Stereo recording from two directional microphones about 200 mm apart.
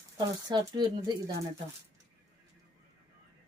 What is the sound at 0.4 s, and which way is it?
Speech, 20° right (ahead or behind).